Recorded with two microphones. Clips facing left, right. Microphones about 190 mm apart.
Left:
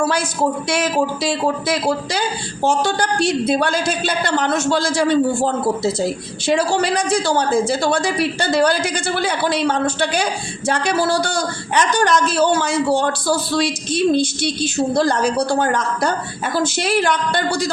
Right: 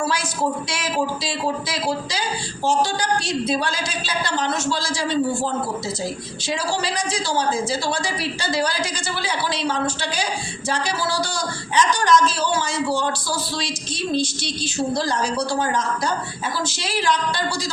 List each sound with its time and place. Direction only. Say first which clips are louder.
0.0 s a man's voice: left 5 dB; 55° left (ahead or behind)